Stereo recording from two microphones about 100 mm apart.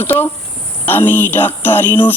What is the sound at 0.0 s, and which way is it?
Speech, 20° left (ahead or behind).